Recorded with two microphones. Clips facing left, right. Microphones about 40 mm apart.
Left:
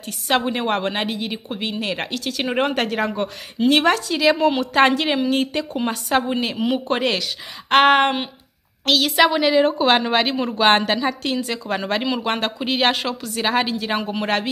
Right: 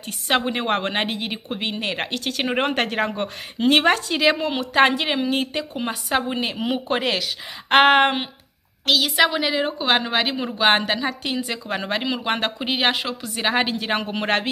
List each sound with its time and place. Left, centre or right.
0.0 s a woman's voice: right
2.1 s speech: right
2.4 s speech: centre
2.7 s a woman's voice: right
4.4 s speech: centre
8.8 s a woman's voice: centre
13.7 s a woman's voice: right